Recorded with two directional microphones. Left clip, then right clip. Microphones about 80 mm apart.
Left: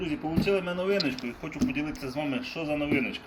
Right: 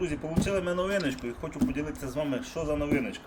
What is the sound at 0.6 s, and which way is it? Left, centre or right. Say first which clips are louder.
Speech: left 1 dB; right.